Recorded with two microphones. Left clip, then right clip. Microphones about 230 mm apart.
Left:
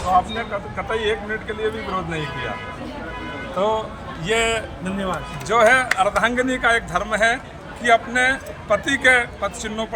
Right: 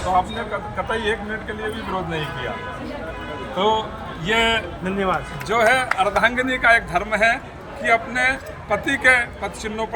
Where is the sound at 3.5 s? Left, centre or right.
Left.